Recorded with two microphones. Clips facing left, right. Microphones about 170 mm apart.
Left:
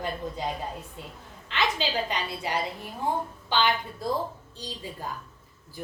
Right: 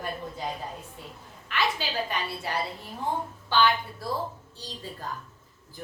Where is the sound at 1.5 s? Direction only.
20° left (ahead or behind).